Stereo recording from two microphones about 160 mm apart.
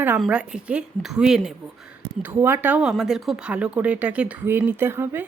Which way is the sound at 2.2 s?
15° right (ahead or behind).